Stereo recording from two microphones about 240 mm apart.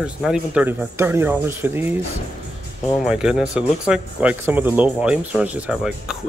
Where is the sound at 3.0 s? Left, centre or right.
Centre.